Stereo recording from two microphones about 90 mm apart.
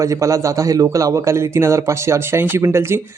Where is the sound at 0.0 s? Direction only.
35° right (ahead or behind).